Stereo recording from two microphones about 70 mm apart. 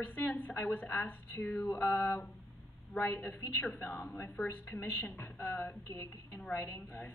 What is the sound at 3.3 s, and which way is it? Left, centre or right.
Speech, left.